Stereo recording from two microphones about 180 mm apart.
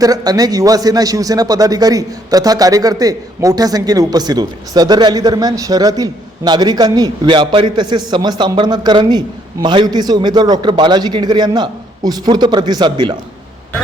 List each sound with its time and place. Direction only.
0.0 s a man's voice: 20° right (ahead or behind)